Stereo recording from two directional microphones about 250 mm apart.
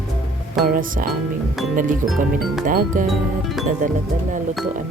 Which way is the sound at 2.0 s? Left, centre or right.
Centre.